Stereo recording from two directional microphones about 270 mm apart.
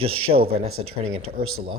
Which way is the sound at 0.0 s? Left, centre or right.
Right.